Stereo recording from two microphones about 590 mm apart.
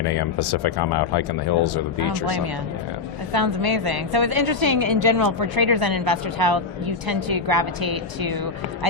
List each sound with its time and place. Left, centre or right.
0.0 s speech: left
3.3 s a woman's voice: right